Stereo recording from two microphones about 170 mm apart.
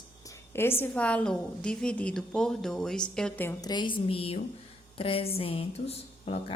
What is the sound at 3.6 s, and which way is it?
A woman's voice, 25° left (ahead or behind).